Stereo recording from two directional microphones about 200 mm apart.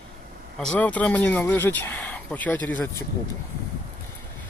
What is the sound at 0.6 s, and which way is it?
Speech, 5° left (ahead or behind).